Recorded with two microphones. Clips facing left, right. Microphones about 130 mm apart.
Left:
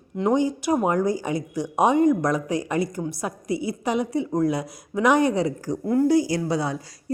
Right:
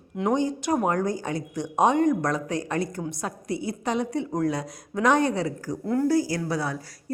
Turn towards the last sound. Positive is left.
turn(degrees=20)  # may be behind; listen again after turning